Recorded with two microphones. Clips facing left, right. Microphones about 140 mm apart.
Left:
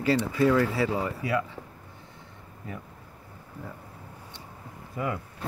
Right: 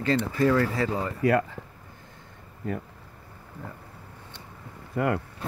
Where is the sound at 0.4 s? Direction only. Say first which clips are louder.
Even; 10° left (ahead or behind).